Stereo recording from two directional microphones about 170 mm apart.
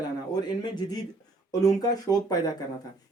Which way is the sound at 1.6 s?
20° left (ahead or behind).